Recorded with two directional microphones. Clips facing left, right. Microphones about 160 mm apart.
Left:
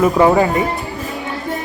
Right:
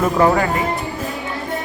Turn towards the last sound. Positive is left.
turn(degrees=20)  # may be behind; listen again after turning